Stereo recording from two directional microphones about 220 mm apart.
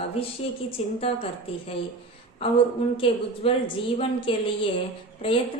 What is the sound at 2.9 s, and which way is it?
A woman's voice, 25° left (ahead or behind).